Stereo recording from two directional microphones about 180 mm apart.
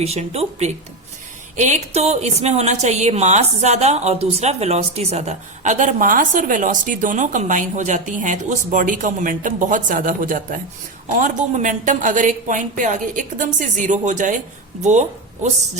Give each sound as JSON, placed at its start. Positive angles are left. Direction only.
{"t": 0.0, "sound": "a woman's voice", "side_deg": -35}